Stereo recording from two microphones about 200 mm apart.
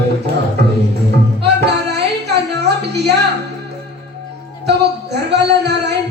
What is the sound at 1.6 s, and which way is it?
Music, 55° right (ahead or behind).